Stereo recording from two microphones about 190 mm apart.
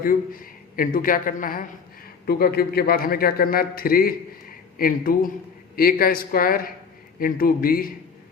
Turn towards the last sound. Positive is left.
turn(degrees=50)  # may be behind; listen again after turning